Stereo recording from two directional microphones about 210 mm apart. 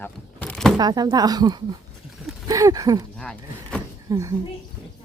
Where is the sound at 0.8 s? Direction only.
20° right (ahead or behind).